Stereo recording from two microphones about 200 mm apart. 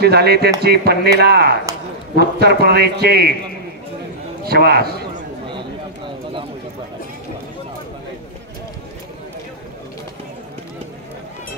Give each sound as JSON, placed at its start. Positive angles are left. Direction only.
{"t": 0.0, "sound": "a man's voice", "side_deg": -55}
{"t": 4.5, "sound": "a man's voice", "side_deg": -50}
{"t": 5.5, "sound": "bird", "side_deg": -25}